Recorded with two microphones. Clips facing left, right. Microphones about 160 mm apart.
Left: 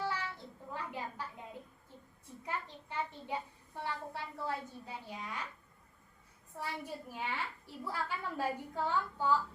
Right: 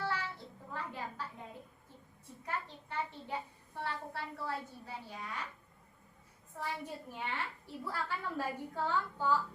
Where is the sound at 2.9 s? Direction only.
15° left (ahead or behind).